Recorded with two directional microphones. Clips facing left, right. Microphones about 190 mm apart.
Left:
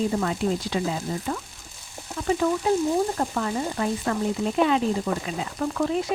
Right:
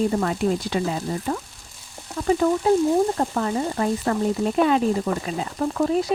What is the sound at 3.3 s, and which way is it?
Speech, 35° right (ahead or behind).